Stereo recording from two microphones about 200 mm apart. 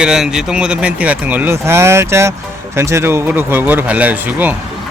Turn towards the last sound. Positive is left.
turn(degrees=-10)  # may be behind; listen again after turning